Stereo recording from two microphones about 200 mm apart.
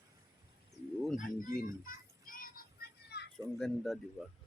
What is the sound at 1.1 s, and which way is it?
Children playing, 40° left (ahead or behind).